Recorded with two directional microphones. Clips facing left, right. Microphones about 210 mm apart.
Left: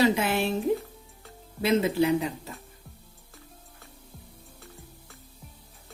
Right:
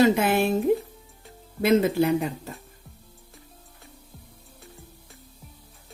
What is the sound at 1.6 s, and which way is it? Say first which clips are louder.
Speech: right 3 dB; 50° right (ahead or behind).